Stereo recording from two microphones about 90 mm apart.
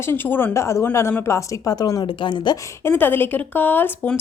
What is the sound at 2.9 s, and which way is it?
A woman's voice, 25° left (ahead or behind).